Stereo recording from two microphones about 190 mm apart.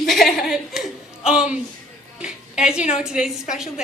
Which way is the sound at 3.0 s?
5° right (ahead or behind).